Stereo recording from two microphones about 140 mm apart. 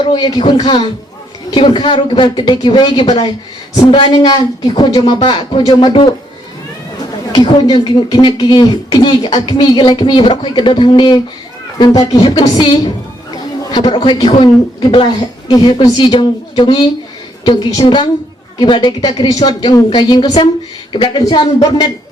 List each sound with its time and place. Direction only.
0.0 s speech: 35° left (ahead or behind)
7.3 s speech: 30° left (ahead or behind)